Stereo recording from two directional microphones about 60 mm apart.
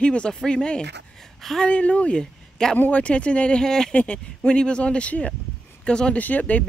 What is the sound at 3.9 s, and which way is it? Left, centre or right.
Speech, left.